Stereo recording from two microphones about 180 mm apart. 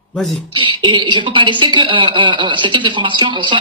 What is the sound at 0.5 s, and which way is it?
Speech, 25° right (ahead or behind).